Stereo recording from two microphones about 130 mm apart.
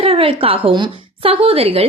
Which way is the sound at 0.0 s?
45° right (ahead or behind).